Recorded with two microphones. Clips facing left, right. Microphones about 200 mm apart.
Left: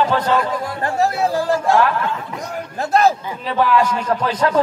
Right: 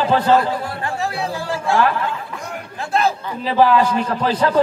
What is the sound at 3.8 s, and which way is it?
Speech, 35° right (ahead or behind).